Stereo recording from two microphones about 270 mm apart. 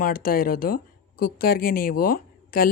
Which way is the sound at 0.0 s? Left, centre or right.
Left.